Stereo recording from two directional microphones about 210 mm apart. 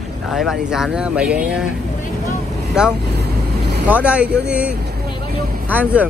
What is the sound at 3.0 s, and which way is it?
Vehicle, 50° right (ahead or behind).